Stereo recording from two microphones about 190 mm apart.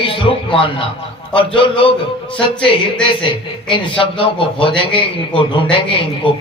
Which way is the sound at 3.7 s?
25° left (ahead or behind).